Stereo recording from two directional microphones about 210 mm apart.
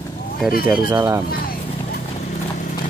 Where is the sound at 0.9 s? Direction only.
15° right (ahead or behind).